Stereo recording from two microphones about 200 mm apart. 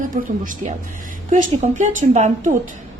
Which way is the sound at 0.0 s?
40° right (ahead or behind).